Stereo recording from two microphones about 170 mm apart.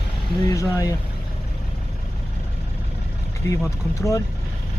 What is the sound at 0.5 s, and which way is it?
Speech, 20° left (ahead or behind).